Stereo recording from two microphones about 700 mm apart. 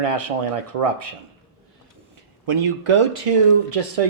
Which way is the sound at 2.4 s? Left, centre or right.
Right.